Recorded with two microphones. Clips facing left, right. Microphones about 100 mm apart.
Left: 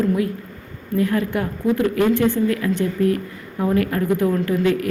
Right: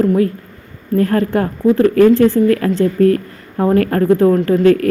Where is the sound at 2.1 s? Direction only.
35° right (ahead or behind).